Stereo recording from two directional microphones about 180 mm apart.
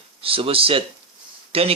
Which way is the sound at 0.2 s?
30° right (ahead or behind).